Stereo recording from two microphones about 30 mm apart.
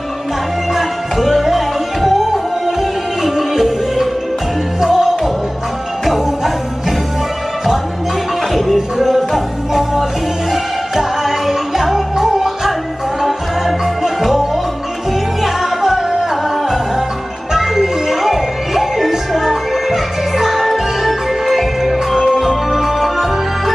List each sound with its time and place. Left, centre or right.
0.7 s music: centre
8.7 s music: centre
15.4 s music: centre
21.9 s music: centre